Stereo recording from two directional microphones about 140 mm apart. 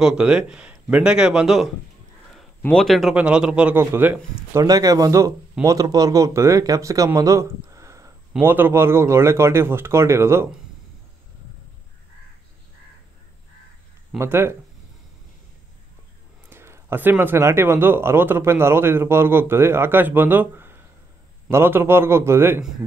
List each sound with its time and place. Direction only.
0.0 s speech: 5° right (ahead or behind)
4.6 s speech: 25° right (ahead or behind)
7.7 s a sound: 25° right (ahead or behind)
8.3 s speech: 15° right (ahead or behind)
14.1 s speech: 15° right (ahead or behind)
16.4 s speech: 15° right (ahead or behind)